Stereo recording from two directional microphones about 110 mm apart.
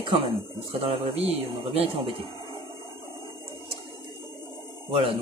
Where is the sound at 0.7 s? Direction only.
60° right (ahead or behind).